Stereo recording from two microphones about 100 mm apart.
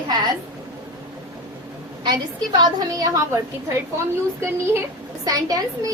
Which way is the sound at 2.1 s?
40° right (ahead or behind).